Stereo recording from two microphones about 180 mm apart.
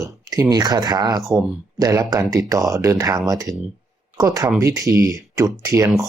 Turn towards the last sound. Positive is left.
turn(degrees=-20)  # may be behind; listen again after turning